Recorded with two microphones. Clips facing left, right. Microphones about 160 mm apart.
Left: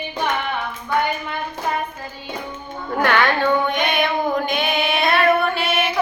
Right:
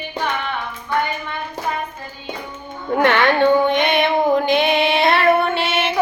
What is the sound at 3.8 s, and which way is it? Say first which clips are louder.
Female singing: right 3 dB; 25° right (ahead or behind).